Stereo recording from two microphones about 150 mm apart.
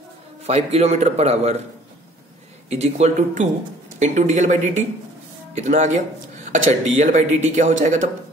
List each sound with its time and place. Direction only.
0.4 s speech: 45° right (ahead or behind)
2.7 s speech: 45° right (ahead or behind)